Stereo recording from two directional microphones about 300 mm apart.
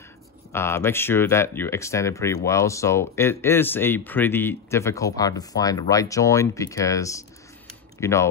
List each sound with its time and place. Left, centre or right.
0.5 s speech: centre